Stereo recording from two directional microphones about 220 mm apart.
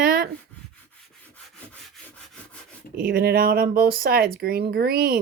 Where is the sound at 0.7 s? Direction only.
5° left (ahead or behind).